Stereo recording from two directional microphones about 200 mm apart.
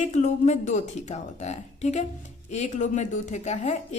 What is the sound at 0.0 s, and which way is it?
A woman's voice, 35° left (ahead or behind).